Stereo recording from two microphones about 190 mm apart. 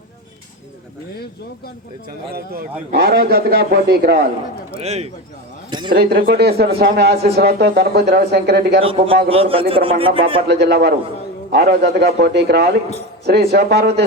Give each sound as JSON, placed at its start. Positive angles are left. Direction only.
{"t": 1.1, "sound": "speech", "side_deg": 55}
{"t": 2.9, "sound": "a man's voice", "side_deg": -55}
{"t": 4.8, "sound": "speech", "side_deg": -35}
{"t": 5.9, "sound": "speech", "side_deg": -55}
{"t": 8.8, "sound": "a man's voice", "side_deg": -30}
{"t": 10.5, "sound": "speech", "side_deg": -60}